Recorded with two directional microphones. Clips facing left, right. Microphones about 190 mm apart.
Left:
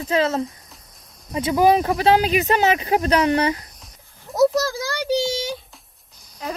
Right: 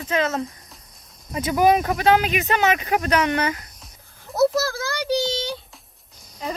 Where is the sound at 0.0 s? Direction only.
35° left (ahead or behind).